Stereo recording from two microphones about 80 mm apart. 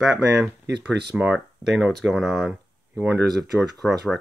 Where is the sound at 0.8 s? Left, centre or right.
Centre.